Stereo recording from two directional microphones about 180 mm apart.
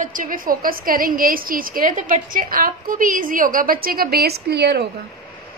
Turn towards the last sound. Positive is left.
turn(degrees=-65)  # may be behind; listen again after turning